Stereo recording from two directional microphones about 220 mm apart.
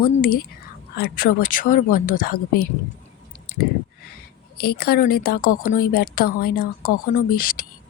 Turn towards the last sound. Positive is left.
turn(degrees=40)  # may be behind; listen again after turning